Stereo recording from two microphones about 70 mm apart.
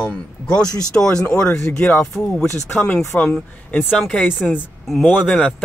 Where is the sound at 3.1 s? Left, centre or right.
Left.